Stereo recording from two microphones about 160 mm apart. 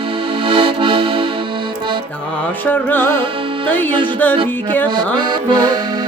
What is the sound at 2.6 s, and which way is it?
Music, 10° left (ahead or behind).